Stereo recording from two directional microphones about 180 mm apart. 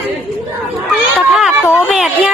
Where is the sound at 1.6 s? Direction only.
15° left (ahead or behind).